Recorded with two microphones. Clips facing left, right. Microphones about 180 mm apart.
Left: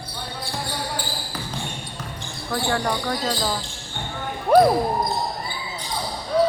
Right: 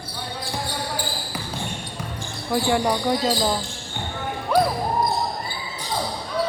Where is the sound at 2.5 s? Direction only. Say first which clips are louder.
Right 3 dB; 15° right (ahead or behind).